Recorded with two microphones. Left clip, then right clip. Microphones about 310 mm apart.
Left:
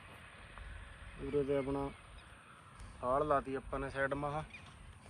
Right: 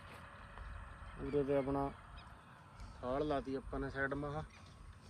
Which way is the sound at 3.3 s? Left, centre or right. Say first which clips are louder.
Left 5 dB; centre.